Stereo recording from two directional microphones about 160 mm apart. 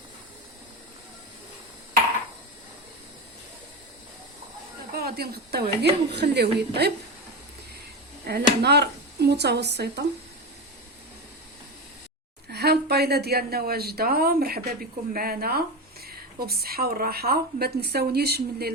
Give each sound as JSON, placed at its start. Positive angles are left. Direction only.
{"t": 4.9, "sound": "a woman's voice", "side_deg": -75}
{"t": 8.3, "sound": "a woman's voice", "side_deg": -90}
{"t": 12.5, "sound": "speech", "side_deg": -90}